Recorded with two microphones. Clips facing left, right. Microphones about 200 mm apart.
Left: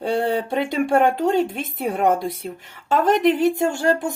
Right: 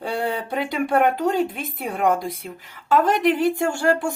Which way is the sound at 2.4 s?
30° left (ahead or behind).